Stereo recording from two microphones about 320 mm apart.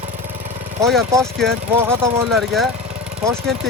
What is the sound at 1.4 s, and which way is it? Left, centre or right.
Speech, centre.